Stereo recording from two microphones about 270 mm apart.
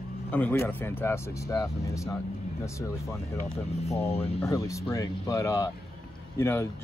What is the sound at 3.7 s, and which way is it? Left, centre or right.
Speech, left.